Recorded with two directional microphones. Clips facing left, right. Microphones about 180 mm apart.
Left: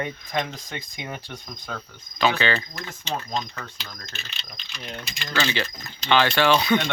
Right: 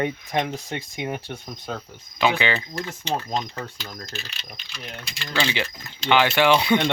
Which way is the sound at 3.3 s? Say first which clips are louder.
Right 2 dB; 30° right (ahead or behind).